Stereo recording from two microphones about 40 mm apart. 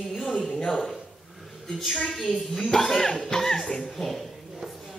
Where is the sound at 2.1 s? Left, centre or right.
Centre.